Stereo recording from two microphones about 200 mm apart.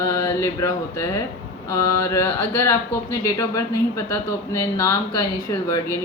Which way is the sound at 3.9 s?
15° left (ahead or behind).